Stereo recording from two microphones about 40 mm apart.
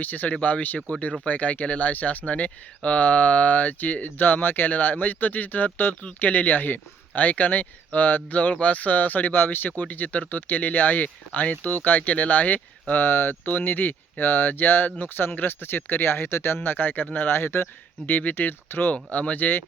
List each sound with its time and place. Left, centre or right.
0.0 s speech: left
9.4 s speech: left
9.6 s speech: left
17.2 s speech: left
18.0 s speech: left
18.3 s speech: left
19.1 s speech: left